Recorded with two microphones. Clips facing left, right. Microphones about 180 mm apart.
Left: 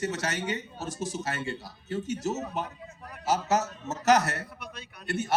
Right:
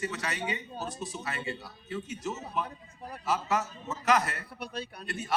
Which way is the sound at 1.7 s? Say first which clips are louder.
Left 4 dB; 45° left (ahead or behind).